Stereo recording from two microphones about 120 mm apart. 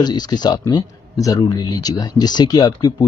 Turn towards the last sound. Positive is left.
turn(degrees=35)  # may be behind; listen again after turning